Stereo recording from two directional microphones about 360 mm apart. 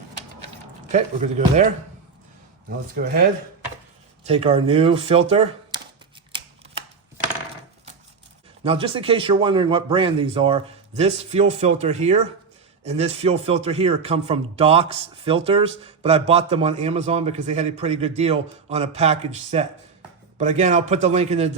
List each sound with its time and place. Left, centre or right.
0.9 s a man's voice: centre
8.6 s a man's voice: centre